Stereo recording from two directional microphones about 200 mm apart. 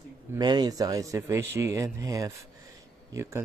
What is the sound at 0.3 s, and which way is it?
A man's voice, 20° right (ahead or behind).